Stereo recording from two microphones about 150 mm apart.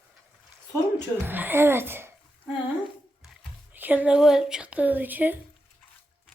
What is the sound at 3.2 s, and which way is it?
Speech, 10° right (ahead or behind).